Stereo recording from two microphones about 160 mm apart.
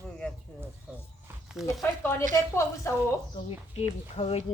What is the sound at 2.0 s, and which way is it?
Speech, 15° left (ahead or behind).